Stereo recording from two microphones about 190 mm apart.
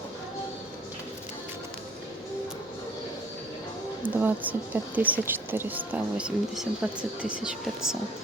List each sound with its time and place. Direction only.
4.0 s a woman's voice: 10° right (ahead or behind)